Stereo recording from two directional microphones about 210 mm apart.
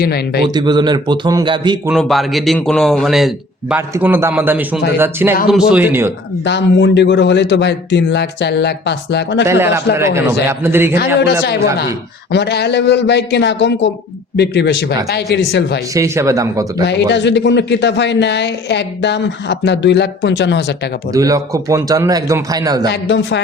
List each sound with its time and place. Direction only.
0.0 s a man's voice: 50° left (ahead or behind)
0.5 s speech: 20° right (ahead or behind)
1.9 s a man's voice: centre (ahead or behind)
6.4 s a man's voice: 55° left (ahead or behind)
9.5 s a man's voice: 10° right (ahead or behind)
10.9 s a man's voice: 50° left (ahead or behind)
16.0 s a man's voice: 15° right (ahead or behind)
16.8 s a man's voice: 55° left (ahead or behind)
21.1 s a man's voice: 15° right (ahead or behind)
22.9 s a man's voice: 60° left (ahead or behind)